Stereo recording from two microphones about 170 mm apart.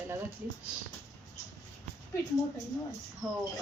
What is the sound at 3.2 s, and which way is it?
Speech, centre (ahead or behind).